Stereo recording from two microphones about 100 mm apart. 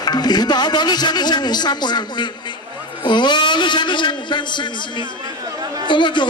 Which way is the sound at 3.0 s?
50° left (ahead or behind).